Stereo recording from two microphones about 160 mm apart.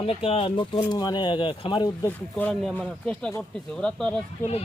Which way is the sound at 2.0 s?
10° left (ahead or behind).